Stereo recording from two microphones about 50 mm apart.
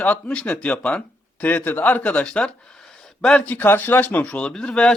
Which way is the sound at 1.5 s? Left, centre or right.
Left.